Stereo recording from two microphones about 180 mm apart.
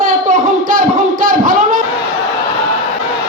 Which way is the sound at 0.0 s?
50° right (ahead or behind).